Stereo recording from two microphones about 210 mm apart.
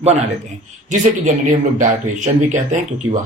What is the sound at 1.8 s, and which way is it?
Speech, 35° right (ahead or behind).